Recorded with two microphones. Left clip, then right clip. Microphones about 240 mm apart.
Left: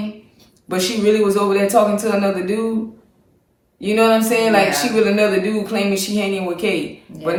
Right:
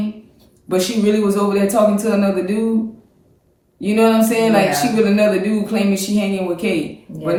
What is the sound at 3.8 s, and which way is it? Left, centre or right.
Speech, centre.